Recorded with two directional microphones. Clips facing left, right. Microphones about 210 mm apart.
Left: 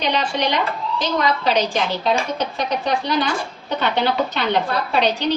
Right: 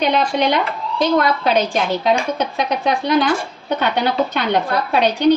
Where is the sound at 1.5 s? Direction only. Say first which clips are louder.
Right 2 dB; 55° right (ahead or behind).